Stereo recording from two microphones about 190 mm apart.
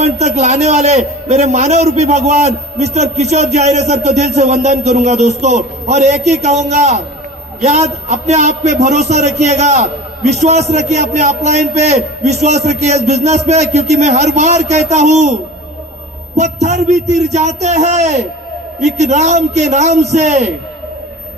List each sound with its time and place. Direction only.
0.0 s a man's voice: 35° right (ahead or behind)
16.3 s a man's voice: 35° right (ahead or behind)